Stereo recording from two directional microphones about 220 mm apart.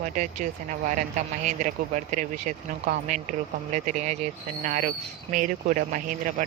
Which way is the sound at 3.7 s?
35° right (ahead or behind).